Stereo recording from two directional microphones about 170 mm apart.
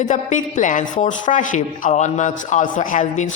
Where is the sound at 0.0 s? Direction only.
45° left (ahead or behind).